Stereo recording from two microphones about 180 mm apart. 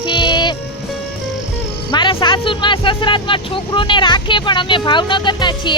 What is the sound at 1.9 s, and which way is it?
Speech, 25° left (ahead or behind).